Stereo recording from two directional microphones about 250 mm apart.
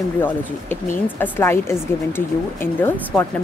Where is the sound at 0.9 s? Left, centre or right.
Centre.